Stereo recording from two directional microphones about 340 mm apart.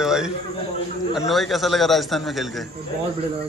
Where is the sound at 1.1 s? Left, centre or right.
Centre.